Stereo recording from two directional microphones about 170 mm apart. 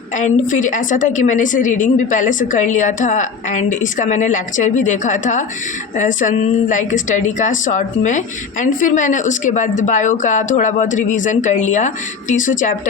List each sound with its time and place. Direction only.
0.2 s a woman's voice: 50° left (ahead or behind)